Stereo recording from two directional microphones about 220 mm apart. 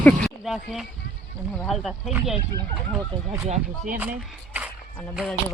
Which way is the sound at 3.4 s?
30° right (ahead or behind).